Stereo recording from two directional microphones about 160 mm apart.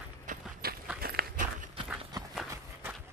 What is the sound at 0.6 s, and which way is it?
Walk, 70° right (ahead or behind).